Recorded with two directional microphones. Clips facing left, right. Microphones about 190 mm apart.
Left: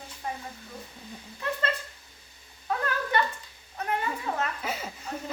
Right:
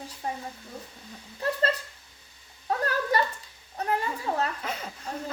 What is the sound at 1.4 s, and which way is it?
Speech, 35° right (ahead or behind).